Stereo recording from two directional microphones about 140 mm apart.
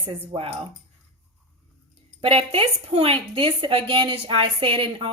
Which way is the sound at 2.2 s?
40° right (ahead or behind).